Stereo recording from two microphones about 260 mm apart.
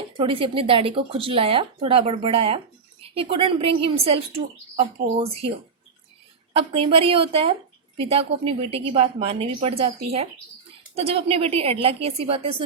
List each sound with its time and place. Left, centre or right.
0.2 s speech: centre
6.5 s speech: right